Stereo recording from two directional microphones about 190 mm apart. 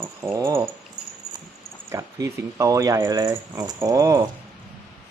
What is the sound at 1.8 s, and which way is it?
Speech, 15° right (ahead or behind).